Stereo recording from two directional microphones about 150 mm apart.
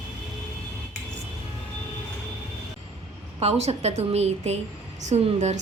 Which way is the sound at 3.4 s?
45° right (ahead or behind).